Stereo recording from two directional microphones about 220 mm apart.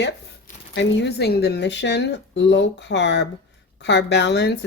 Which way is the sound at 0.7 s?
50° left (ahead or behind).